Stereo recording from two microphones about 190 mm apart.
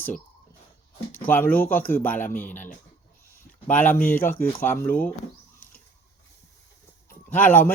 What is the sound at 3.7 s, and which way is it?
Speech, 10° left (ahead or behind).